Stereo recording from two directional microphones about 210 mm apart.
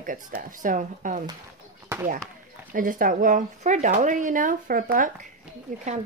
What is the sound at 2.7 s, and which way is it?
Speech, 40° right (ahead or behind).